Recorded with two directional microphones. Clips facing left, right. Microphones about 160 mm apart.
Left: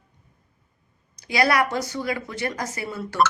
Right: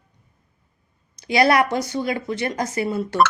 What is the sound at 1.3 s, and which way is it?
Speech, 25° right (ahead or behind).